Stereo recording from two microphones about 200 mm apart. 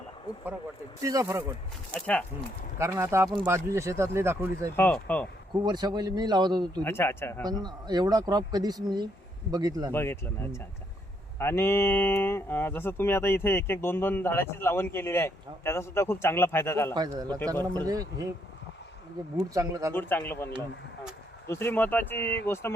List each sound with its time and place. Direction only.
1.0 s speech: 15° right (ahead or behind)
2.0 s speech: 5° left (ahead or behind)
2.7 s speech: 15° right (ahead or behind)
4.8 s speech: 10° left (ahead or behind)
5.6 s speech: 20° right (ahead or behind)
6.8 s speech: 10° left (ahead or behind)
7.4 s speech: 20° right (ahead or behind)
9.9 s speech: 10° left (ahead or behind)
16.9 s speech: 20° right (ahead or behind)
19.4 s speech: 15° right (ahead or behind)
19.9 s speech: 10° left (ahead or behind)
21.5 s speech: 10° left (ahead or behind)